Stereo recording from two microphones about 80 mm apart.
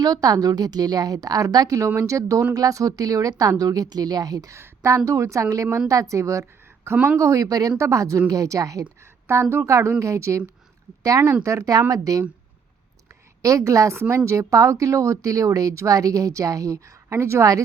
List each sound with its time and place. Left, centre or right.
0.0 s a woman's voice: right
4.5 s a woman's voice: right
6.9 s speech: centre
7.2 s a woman's voice: right
9.2 s a woman's voice: right
13.4 s a woman's voice: right